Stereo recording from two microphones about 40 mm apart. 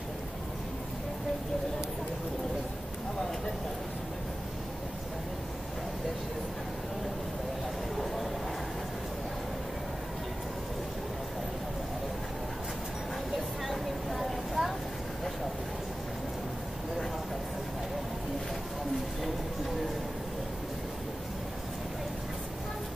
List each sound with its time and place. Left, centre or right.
13.7 s vehicle: centre